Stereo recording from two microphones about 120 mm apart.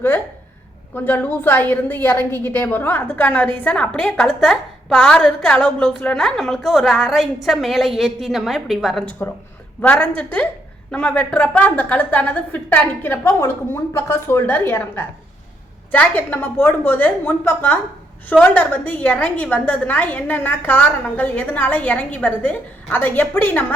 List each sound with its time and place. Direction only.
0.9 s a woman's voice: 15° left (ahead or behind); by 9.0 s centre (ahead or behind)
9.0 s a woman's voice: 15° left (ahead or behind)